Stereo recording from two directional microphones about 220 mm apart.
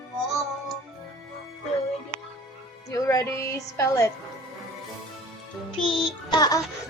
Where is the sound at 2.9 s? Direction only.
15° left (ahead or behind).